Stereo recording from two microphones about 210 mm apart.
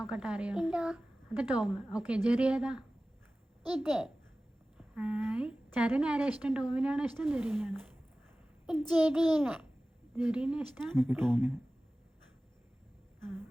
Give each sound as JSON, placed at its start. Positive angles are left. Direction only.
{"t": 0.0, "sound": "a woman's voice", "side_deg": -5}